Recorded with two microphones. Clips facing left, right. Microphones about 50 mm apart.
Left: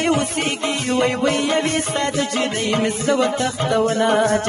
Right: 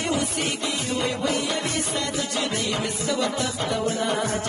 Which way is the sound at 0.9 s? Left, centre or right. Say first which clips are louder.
Left 7 dB; left.